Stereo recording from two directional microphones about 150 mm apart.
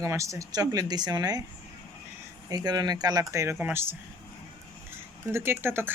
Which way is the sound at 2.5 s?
25° right (ahead or behind).